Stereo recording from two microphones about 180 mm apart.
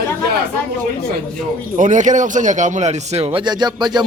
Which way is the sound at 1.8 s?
45° right (ahead or behind).